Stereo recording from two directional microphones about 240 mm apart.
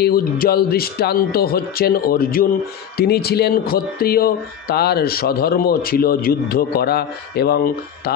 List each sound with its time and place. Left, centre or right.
0.0 s speech: left